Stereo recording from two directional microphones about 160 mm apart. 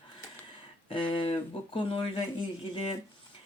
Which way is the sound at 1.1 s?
35° left (ahead or behind).